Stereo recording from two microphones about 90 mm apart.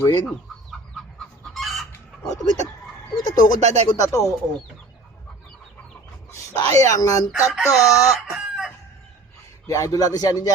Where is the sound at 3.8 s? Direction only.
45° left (ahead or behind).